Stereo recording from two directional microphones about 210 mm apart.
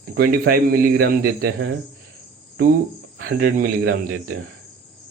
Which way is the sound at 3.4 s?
45° right (ahead or behind).